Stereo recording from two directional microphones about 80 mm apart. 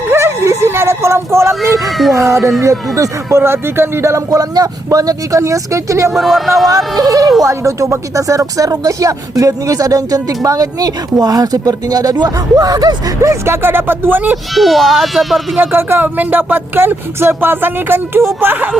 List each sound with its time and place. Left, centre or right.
0.1 s music: right
2.1 s speech: right
4.3 s speech: right
6.1 s speech: centre
6.7 s speech: right
13.4 s speech: right
14.5 s speech: centre
15.6 s speech: right